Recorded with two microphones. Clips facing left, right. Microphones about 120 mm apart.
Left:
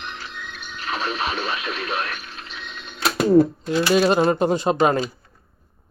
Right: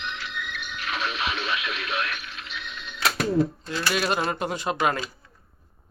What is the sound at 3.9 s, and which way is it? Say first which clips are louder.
Speech: left 9 dB; 30° left (ahead or behind).